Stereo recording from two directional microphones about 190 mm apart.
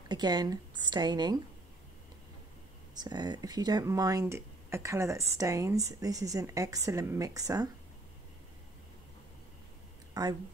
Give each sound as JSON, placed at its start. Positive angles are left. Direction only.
{"t": 0.1, "sound": "a woman's voice", "side_deg": -20}
{"t": 2.9, "sound": "speech", "side_deg": -20}
{"t": 10.2, "sound": "speech", "side_deg": -20}